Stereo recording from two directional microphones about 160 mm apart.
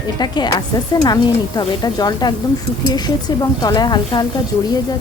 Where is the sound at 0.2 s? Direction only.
25° left (ahead or behind).